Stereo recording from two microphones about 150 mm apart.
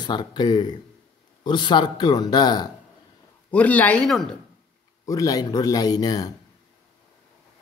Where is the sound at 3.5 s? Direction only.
10° left (ahead or behind).